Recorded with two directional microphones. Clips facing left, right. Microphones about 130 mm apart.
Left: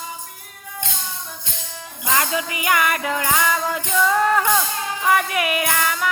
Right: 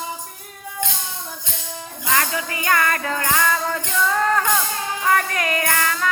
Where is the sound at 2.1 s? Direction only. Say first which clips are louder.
Left 1 dB; 20° left (ahead or behind).